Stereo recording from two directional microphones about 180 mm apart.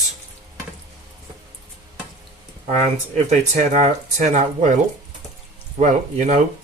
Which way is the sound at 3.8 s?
40° right (ahead or behind).